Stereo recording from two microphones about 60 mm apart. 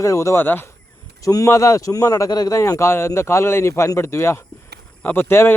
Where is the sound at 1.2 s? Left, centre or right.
Left.